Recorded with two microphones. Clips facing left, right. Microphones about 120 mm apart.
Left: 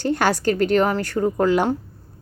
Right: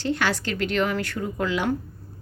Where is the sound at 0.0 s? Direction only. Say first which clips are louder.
Left 6 dB; 45° left (ahead or behind).